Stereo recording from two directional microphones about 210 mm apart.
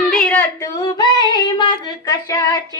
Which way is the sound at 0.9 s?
20° left (ahead or behind).